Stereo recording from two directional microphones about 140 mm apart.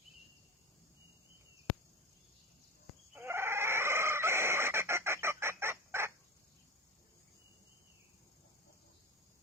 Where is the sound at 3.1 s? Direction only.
15° right (ahead or behind).